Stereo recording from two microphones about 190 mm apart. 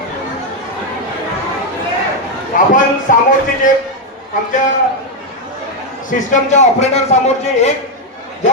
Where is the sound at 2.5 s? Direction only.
45° left (ahead or behind).